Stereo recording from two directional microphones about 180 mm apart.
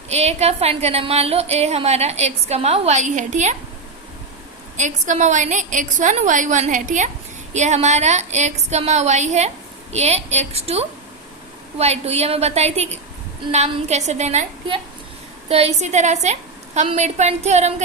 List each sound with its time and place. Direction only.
0.1 s speech: 35° right (ahead or behind)
4.8 s a woman's voice: 40° right (ahead or behind)